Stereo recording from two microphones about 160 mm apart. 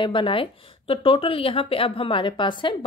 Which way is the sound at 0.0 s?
30° left (ahead or behind).